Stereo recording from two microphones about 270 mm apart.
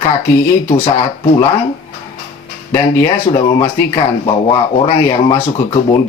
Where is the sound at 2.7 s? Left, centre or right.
Centre.